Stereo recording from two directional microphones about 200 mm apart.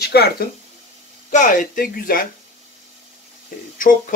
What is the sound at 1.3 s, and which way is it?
Speech, 40° left (ahead or behind).